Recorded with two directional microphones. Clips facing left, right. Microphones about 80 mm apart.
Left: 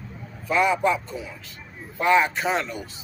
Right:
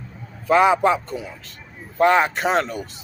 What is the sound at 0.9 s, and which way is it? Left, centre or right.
Speech, right.